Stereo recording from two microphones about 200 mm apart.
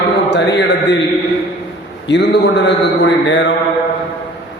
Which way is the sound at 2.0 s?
60° left (ahead or behind).